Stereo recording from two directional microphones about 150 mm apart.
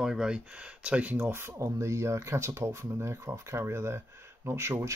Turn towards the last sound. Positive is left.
turn(degrees=-15)  # may be behind; listen again after turning